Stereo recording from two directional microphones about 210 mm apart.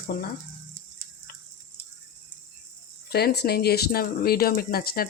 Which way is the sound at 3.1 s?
50° left (ahead or behind).